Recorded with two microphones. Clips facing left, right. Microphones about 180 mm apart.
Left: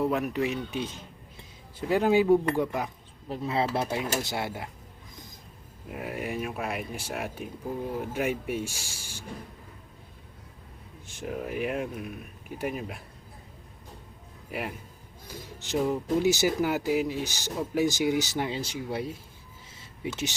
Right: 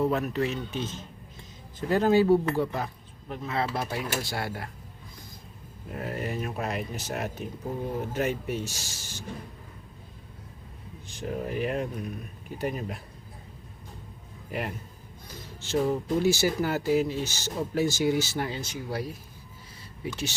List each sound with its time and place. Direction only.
0.0 s speech: 10° left (ahead or behind)
3.2 s speech: 30° left (ahead or behind)
5.9 s speech: 10° left (ahead or behind)
11.2 s speech: 5° left (ahead or behind)
14.5 s speech: 5° left (ahead or behind)